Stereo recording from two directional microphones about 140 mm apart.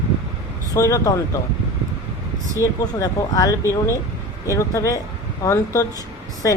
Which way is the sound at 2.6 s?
25° left (ahead or behind).